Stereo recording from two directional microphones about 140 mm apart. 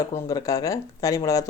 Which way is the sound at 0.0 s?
20° left (ahead or behind).